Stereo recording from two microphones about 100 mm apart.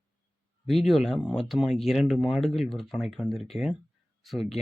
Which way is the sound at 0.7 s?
Centre (ahead or behind).